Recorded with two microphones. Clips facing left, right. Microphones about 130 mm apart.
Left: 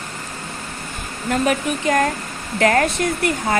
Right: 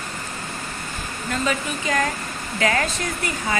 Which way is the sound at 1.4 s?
55° left (ahead or behind).